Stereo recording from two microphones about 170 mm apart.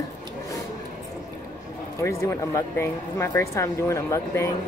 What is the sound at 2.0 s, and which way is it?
Speech, 15° left (ahead or behind).